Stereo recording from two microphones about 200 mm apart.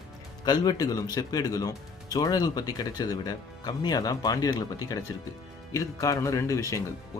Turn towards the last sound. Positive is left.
turn(degrees=15)  # may be behind; listen again after turning